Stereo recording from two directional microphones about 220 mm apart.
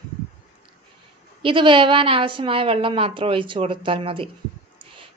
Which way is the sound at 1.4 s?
20° right (ahead or behind).